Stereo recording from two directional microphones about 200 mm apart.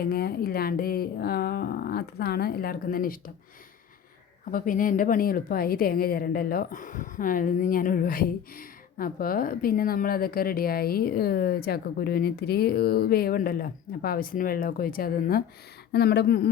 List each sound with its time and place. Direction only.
0.0 s speech: 50° left (ahead or behind)
4.5 s speech: 45° left (ahead or behind)